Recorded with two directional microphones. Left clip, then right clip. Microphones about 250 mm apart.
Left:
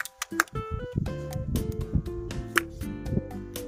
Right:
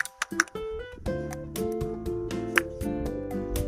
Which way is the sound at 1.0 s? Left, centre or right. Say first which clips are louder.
Right 4 dB; centre.